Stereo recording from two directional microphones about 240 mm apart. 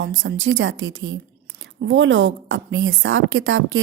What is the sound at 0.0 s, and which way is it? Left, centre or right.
A woman's voice, right.